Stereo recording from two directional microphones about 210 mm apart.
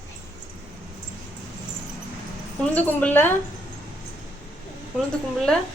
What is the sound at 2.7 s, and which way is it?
Speech, 10° left (ahead or behind).